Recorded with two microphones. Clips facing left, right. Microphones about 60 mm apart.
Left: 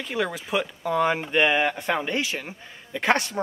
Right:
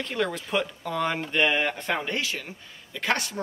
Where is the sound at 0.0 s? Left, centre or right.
Centre.